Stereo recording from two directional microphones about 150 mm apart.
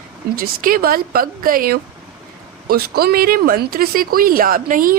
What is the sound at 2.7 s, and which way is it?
Speech, 90° right.